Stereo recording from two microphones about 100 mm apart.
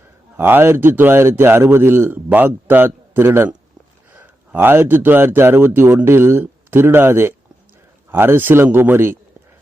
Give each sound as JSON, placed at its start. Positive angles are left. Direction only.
{"t": 0.3, "sound": "a man's voice", "side_deg": -20}